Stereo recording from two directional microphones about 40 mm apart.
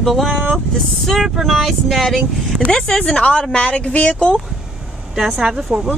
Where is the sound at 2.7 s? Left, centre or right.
Centre.